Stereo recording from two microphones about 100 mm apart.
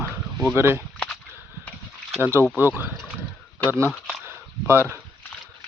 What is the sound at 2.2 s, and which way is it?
Speech, 25° right (ahead or behind).